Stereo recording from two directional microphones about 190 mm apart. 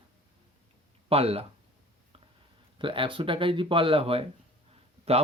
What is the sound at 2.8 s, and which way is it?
Speech, 25° right (ahead or behind).